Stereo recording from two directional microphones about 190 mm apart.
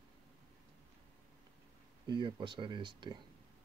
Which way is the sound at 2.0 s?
25° right (ahead or behind).